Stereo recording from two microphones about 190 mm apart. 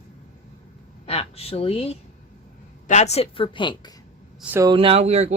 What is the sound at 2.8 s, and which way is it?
A woman's voice, 35° left (ahead or behind).